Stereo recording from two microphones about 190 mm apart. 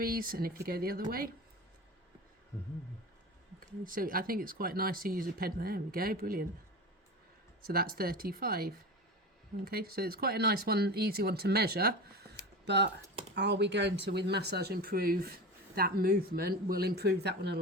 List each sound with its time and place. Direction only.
0.0 s speech: 50° right (ahead or behind)
3.6 s speech: 45° right (ahead or behind)
7.7 s speech: 50° right (ahead or behind)